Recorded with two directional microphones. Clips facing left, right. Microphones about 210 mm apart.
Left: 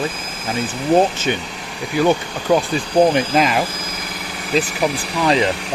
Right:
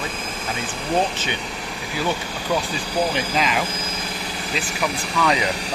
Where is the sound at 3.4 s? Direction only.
45° left (ahead or behind).